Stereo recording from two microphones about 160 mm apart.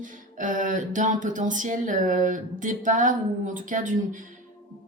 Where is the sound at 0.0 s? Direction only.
55° right (ahead or behind).